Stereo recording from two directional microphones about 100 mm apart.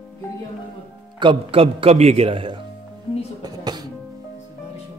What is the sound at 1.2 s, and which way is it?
A man's voice, 60° right (ahead or behind).